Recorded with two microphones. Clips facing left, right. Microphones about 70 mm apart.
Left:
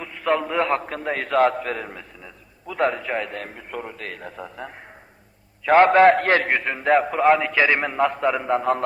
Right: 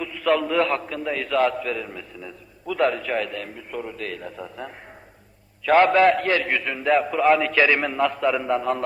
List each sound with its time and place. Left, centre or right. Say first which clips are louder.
0.0 s a man's voice: right 1 dB; left
0.9 s a man's voice: left 1 dB; left
2.2 s a man's voice: right 5 dB; left
3.3 s a man's voice: even; left
5.7 s a man's voice: left 3 dB; left
6.5 s a man's voice: left 2 dB; left
7.4 s a man's voice: even; centre; by 8.8 s left